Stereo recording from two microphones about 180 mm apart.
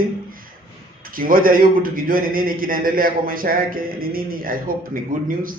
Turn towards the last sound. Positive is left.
turn(degrees=-50)  # may be behind; listen again after turning